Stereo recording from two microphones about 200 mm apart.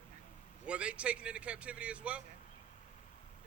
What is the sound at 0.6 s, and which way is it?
Speech, 5° right (ahead or behind).